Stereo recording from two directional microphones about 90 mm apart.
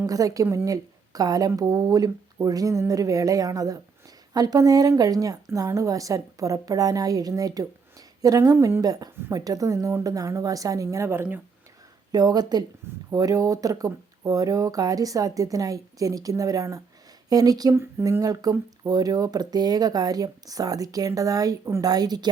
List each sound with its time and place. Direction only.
0.0 s speech: 40° right (ahead or behind)
10.8 s a woman's voice: 30° right (ahead or behind)
12.1 s speech: 50° right (ahead or behind)